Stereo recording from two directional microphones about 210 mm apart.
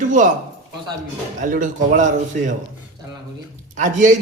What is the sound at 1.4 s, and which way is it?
Speech, 40° right (ahead or behind).